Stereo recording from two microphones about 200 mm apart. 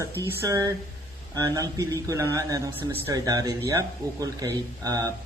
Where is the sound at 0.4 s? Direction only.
15° right (ahead or behind).